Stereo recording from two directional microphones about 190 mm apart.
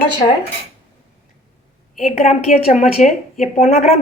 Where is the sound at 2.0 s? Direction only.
35° left (ahead or behind).